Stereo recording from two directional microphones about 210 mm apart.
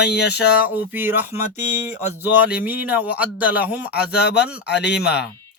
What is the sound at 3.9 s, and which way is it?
Speech, 50° left (ahead or behind).